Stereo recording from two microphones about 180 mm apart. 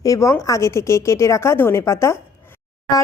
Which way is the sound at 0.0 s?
20° left (ahead or behind).